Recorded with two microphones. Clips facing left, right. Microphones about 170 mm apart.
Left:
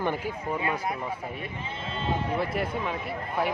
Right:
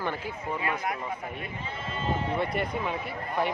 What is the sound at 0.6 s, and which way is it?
Speech, 25° left (ahead or behind).